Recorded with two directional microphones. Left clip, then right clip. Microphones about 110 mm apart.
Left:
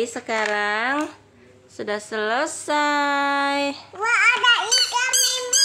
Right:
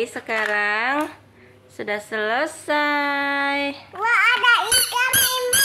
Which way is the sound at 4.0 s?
20° left (ahead or behind).